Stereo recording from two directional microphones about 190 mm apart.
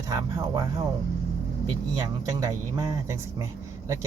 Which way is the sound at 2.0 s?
20° right (ahead or behind).